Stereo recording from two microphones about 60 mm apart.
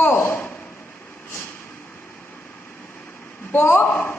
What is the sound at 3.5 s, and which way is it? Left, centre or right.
Speech, left.